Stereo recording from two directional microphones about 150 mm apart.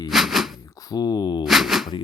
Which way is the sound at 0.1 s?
Centre (ahead or behind).